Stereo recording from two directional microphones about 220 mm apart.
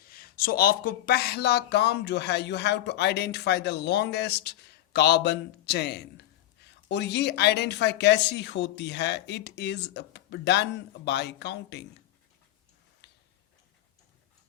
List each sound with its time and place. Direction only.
0.1 s speech: 40° left (ahead or behind)